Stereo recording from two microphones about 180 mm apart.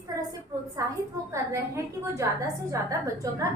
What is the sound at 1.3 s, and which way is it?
A woman's voice, 15° right (ahead or behind).